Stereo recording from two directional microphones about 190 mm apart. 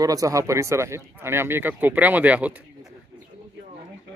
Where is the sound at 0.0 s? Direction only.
20° right (ahead or behind).